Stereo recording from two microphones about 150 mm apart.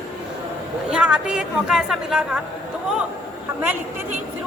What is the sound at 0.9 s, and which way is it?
A woman's voice, 5° right (ahead or behind).